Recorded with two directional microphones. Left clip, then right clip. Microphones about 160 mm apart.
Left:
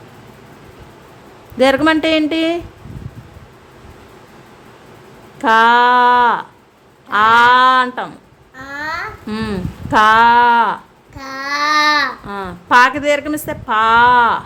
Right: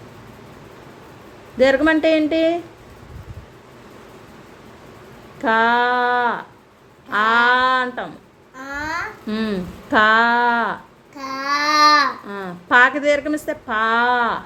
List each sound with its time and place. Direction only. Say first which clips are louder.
1.5 s a woman's voice: left 3 dB; 15° left (ahead or behind)
5.4 s a sound: left 6 dB; 15° left (ahead or behind)
7.1 s a woman's voice: left 6 dB; 10° left (ahead or behind)
8.5 s babbling: left 2 dB; 15° left (ahead or behind)
9.3 s a woman's voice: even; 10° left (ahead or behind)
11.2 s babbling: left 2 dB; 20° left (ahead or behind)
12.2 s a woman's voice: left 4 dB; 10° left (ahead or behind)